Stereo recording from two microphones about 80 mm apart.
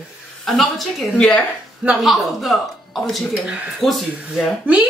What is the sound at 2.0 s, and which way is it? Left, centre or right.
A woman's voice, centre.